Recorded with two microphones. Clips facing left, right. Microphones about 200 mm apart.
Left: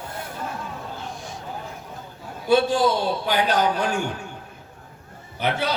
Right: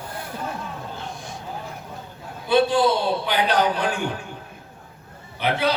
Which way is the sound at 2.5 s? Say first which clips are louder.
Even; 45° left (ahead or behind).